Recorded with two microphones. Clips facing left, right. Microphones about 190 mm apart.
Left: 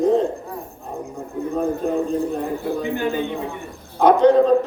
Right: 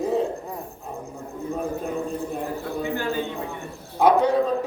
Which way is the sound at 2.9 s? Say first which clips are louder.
Left 3 dB; 20° left (ahead or behind).